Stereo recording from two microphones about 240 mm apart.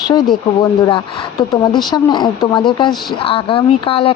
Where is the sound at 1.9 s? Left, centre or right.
Centre.